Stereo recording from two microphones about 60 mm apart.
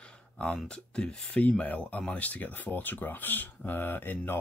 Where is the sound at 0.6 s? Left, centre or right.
Centre; by 4.3 s left.